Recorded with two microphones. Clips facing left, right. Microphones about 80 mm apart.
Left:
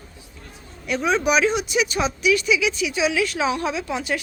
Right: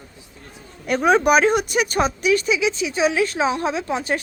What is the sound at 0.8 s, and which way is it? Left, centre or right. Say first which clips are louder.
Speech: right 4 dB; right.